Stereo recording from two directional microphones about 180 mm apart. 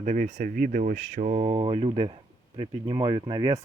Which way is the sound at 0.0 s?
40° right (ahead or behind).